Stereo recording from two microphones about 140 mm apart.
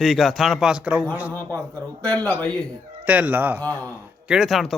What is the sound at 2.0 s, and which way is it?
Speech, 10° left (ahead or behind).